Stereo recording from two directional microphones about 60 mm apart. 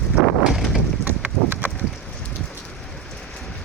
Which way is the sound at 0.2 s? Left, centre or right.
Centre.